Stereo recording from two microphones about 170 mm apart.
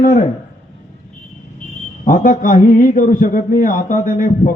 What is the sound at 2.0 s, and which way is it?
A man's voice, 50° left (ahead or behind).